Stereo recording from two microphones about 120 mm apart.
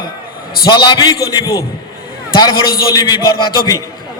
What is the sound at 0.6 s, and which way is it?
A man's voice, 40° left (ahead or behind).